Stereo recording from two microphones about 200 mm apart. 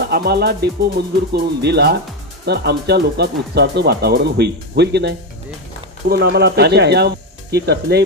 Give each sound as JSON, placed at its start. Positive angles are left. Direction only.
{"t": 0.1, "sound": "speech", "side_deg": -55}